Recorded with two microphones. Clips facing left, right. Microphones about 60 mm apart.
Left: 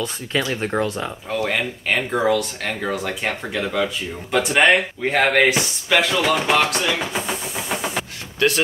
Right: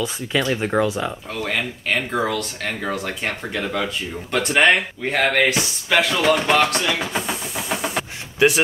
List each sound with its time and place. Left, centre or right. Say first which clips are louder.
0.0 s speech: right 1 dB; centre
8.4 s speech: right 3 dB; centre